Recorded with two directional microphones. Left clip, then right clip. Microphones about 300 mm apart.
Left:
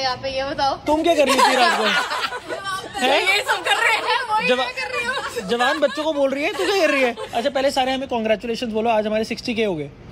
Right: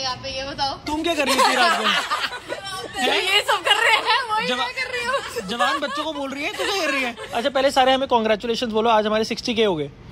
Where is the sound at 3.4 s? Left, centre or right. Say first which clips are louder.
Right 1 dB; centre.